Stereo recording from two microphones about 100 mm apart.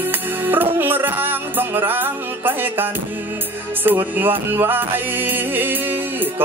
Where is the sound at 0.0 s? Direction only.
20° right (ahead or behind).